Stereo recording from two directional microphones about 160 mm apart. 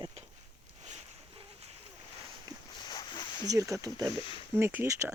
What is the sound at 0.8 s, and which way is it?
Boat, 45° right (ahead or behind).